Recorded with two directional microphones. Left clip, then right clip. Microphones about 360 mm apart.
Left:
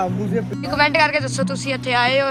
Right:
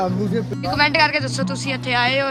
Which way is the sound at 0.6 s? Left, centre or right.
Centre.